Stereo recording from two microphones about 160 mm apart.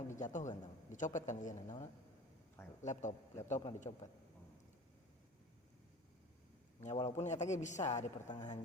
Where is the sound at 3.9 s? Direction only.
30° left (ahead or behind).